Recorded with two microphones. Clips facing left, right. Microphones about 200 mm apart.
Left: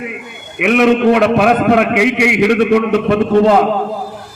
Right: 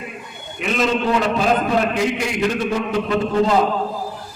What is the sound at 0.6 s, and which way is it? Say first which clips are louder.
A man's voice: left 9 dB; 70° left (ahead or behind).